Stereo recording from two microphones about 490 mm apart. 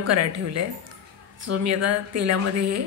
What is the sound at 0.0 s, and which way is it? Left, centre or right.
A woman's voice, right.